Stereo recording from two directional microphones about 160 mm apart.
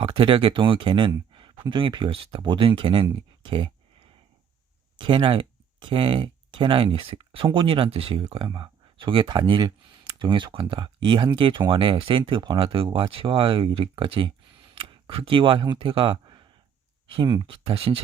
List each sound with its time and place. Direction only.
0.0 s speech: 30° right (ahead or behind)
4.9 s speech: 30° right (ahead or behind)